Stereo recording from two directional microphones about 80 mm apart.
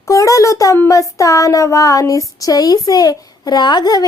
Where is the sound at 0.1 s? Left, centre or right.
Left.